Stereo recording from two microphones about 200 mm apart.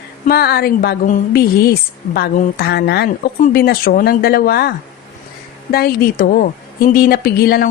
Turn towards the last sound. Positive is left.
turn(degrees=50)  # may be behind; listen again after turning